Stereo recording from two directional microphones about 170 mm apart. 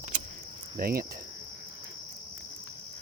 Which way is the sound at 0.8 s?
60° right (ahead or behind).